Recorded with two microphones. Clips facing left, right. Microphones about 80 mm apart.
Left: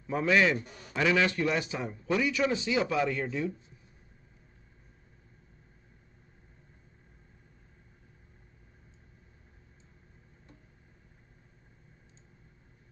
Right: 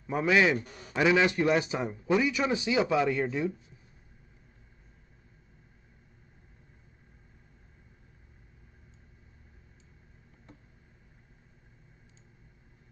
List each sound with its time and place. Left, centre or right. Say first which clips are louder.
0.0 s a man's voice: right 1 dB; centre